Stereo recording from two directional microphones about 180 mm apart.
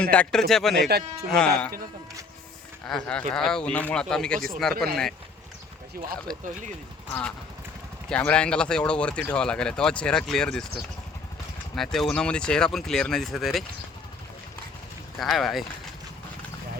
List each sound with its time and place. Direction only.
0.0 s speech: 5° left (ahead or behind)
0.9 s speech: 60° right (ahead or behind)
1.4 s speech: 5° left (ahead or behind)
2.8 s speech: 5° left (ahead or behind)
6.3 s speech: centre (ahead or behind)
11.8 s speech: centre (ahead or behind)
15.2 s speech: centre (ahead or behind)